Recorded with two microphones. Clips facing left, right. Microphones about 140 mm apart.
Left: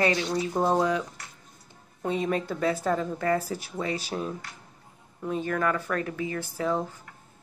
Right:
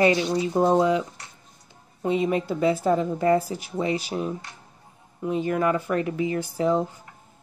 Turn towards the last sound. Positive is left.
turn(degrees=-20)  # may be behind; listen again after turning